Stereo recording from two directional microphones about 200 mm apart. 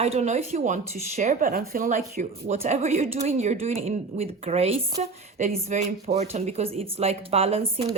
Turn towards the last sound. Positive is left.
turn(degrees=-30)  # may be behind; listen again after turning